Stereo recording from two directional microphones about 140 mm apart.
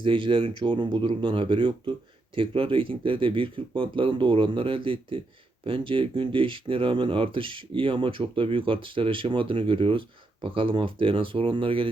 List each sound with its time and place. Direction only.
0.0 s speech: 35° right (ahead or behind)